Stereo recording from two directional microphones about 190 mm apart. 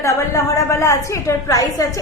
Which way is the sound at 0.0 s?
15° left (ahead or behind).